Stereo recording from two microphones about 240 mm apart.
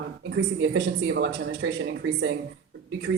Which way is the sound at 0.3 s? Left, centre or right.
Right.